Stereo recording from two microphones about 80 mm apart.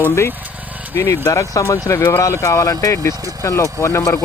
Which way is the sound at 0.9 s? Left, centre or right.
Left.